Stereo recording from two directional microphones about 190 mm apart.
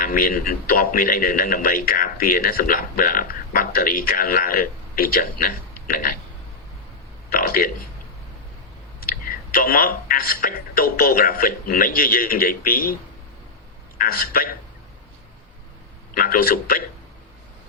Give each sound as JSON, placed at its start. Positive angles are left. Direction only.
{"t": 0.0, "sound": "a man's voice", "side_deg": 50}
{"t": 7.3, "sound": "a sound", "side_deg": 50}
{"t": 9.0, "sound": "a man's voice", "side_deg": 50}
{"t": 14.0, "sound": "a man's voice", "side_deg": 50}
{"t": 16.1, "sound": "a man's voice", "side_deg": 50}